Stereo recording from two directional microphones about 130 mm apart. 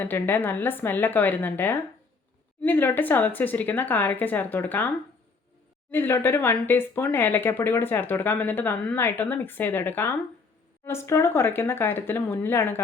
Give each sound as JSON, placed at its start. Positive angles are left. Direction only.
{"t": 0.0, "sound": "speech", "side_deg": 15}
{"t": 5.9, "sound": "speech", "side_deg": 15}